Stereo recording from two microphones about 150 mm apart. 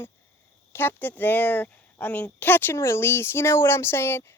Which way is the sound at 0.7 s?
15° left (ahead or behind).